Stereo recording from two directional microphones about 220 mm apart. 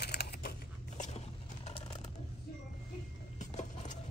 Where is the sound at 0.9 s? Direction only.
30° left (ahead or behind).